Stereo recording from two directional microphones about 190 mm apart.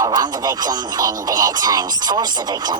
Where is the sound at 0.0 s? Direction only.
20° right (ahead or behind).